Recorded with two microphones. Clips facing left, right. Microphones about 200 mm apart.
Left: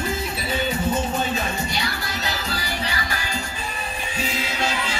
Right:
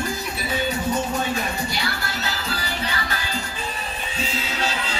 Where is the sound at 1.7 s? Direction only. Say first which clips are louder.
Even; 15° left (ahead or behind).